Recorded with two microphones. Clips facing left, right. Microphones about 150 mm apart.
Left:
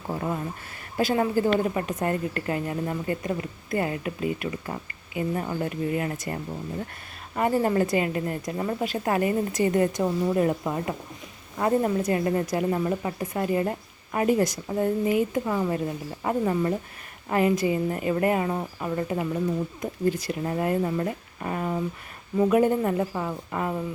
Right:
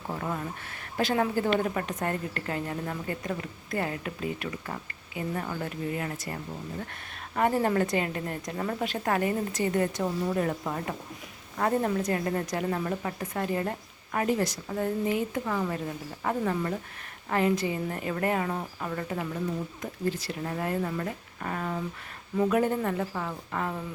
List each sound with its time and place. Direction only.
0.1 s a sound: 15° left (ahead or behind)
0.9 s a woman's voice: 10° left (ahead or behind)
7.3 s a woman's voice: 5° left (ahead or behind)